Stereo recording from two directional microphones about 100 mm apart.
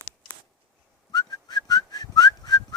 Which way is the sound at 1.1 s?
45° left (ahead or behind).